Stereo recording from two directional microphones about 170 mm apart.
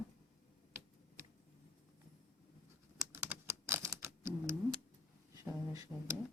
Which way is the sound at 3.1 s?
15° right (ahead or behind).